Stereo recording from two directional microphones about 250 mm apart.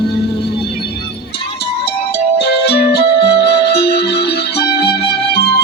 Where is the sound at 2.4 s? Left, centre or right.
Left.